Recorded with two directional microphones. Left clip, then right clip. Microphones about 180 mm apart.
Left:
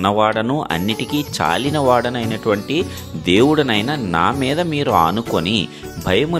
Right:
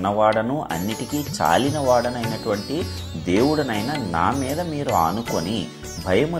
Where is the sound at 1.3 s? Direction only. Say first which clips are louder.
Even; 40° left (ahead or behind).